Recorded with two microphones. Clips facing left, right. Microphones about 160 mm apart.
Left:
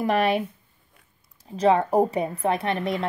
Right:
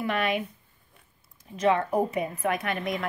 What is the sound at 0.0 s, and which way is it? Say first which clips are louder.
Speech: left 5 dB; 35° left (ahead or behind).